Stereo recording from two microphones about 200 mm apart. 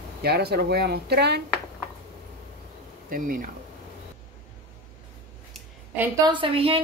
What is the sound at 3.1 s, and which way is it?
Speech, 45° right (ahead or behind).